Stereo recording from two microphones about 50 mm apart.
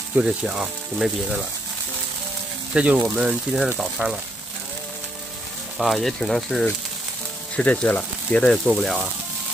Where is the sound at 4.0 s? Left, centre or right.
Right.